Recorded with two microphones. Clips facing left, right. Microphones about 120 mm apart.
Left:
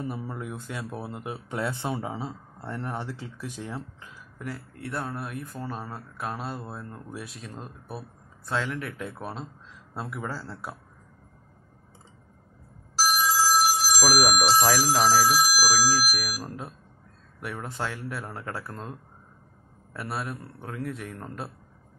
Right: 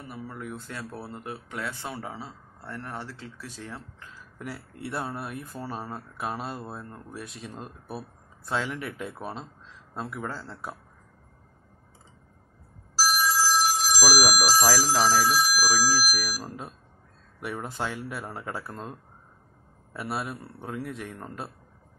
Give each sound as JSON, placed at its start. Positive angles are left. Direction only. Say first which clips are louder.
{"t": 0.0, "sound": "speech", "louder": "left 4 dB", "side_deg": 25}
{"t": 4.4, "sound": "speech", "louder": "left 1 dB", "side_deg": -5}
{"t": 13.0, "sound": "telephone bell ringing", "louder": "left 1 dB", "side_deg": 15}
{"t": 14.0, "sound": "speech", "louder": "left 1 dB", "side_deg": -10}
{"t": 14.3, "sound": "a sound", "louder": "left 2 dB", "side_deg": 25}
{"t": 14.7, "sound": "speech", "louder": "left 1 dB", "side_deg": 15}
{"t": 16.0, "sound": "speech", "louder": "even", "side_deg": 0}